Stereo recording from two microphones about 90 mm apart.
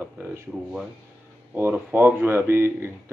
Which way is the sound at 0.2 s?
25° right (ahead or behind).